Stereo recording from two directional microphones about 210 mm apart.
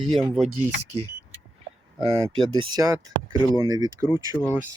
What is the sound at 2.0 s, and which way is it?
Speech, 20° right (ahead or behind).